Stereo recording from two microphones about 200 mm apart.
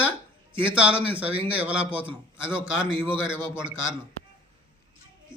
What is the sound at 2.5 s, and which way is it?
A man's voice, 10° left (ahead or behind).